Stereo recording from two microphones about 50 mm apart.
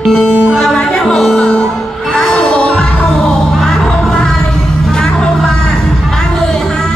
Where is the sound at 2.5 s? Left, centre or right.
Centre.